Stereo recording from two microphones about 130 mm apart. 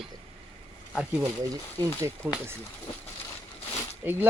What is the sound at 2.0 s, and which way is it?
Speech, 15° right (ahead or behind).